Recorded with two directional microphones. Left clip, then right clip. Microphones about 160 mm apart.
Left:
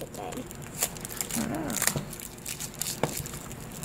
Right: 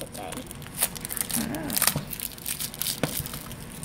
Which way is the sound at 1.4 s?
15° left (ahead or behind).